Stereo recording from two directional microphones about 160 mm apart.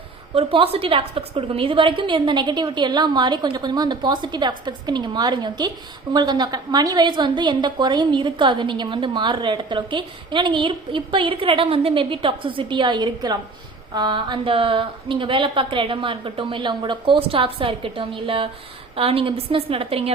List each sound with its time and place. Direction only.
0.3 s a woman's voice: 35° right (ahead or behind)